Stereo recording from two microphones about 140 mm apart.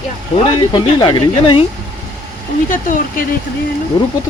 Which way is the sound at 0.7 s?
35° left (ahead or behind).